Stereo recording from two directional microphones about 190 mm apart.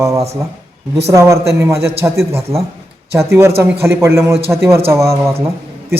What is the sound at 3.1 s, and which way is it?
A man's voice, 15° right (ahead or behind).